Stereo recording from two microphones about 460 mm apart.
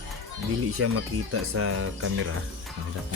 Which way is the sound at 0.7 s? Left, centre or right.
Right.